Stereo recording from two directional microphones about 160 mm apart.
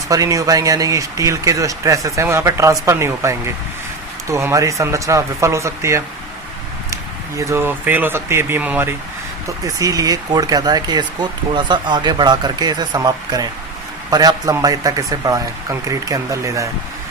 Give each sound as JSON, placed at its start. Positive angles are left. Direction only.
{"t": 0.1, "sound": "speech", "side_deg": -20}
{"t": 9.6, "sound": "speech", "side_deg": -20}